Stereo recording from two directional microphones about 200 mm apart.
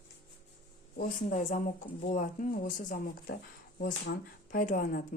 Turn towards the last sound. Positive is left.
turn(degrees=40)  # may be behind; listen again after turning